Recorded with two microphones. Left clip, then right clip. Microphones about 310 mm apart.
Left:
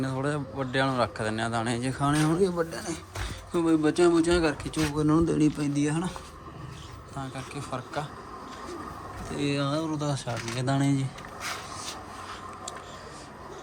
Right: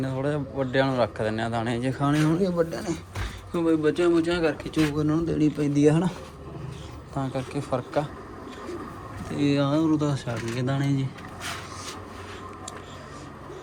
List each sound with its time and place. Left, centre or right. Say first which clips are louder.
0.0 s a man's voice: right 2 dB; centre
7.2 s a man's voice: right 7 dB; centre
9.3 s a man's voice: right 5 dB; centre